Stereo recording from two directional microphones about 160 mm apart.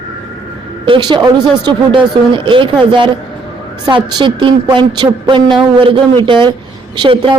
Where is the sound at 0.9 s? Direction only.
30° right (ahead or behind).